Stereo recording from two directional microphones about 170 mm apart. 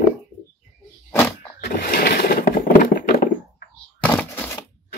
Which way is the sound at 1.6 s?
60° left (ahead or behind).